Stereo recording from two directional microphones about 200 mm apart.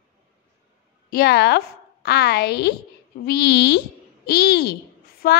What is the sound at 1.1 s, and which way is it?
A woman's voice, 50° left (ahead or behind).